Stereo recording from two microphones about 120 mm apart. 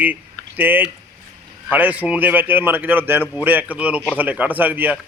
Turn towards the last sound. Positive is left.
turn(degrees=-15)  # may be behind; listen again after turning